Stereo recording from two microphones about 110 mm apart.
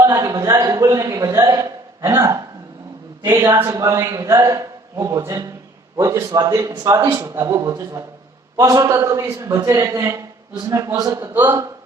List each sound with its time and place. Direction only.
0.0 s a man's voice: 35° right (ahead or behind)
3.6 s a man's voice: 30° right (ahead or behind)